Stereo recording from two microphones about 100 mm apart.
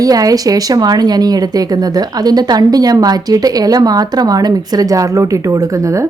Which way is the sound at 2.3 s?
40° right (ahead or behind).